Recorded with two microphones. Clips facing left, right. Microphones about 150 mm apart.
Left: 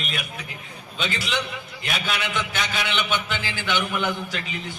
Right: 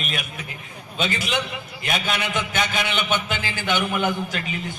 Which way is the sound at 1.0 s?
45° right (ahead or behind).